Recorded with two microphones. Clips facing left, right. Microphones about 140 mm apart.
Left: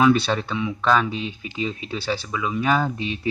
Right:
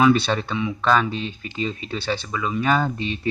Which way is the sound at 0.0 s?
5° left (ahead or behind).